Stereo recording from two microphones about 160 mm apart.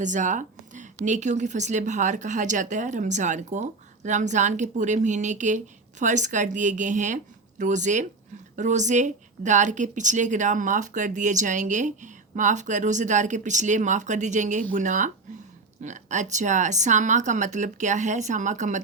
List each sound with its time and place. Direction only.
0.0 s speech: 50° right (ahead or behind)